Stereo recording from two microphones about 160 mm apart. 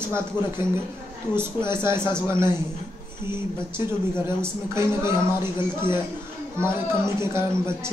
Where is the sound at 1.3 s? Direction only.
15° right (ahead or behind).